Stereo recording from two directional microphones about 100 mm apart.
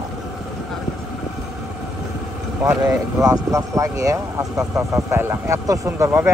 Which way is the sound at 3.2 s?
35° right (ahead or behind).